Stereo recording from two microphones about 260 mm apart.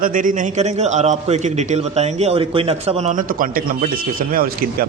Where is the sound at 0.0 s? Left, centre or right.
Right.